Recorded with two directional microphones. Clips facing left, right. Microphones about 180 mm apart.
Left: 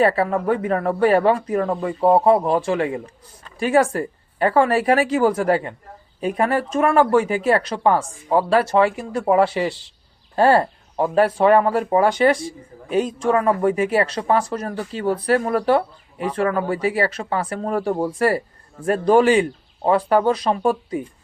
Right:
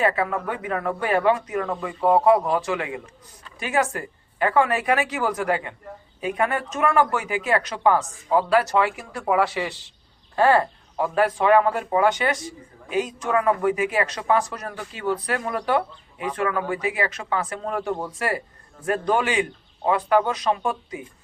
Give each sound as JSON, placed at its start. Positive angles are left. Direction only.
{"t": 0.0, "sound": "speech", "side_deg": 35}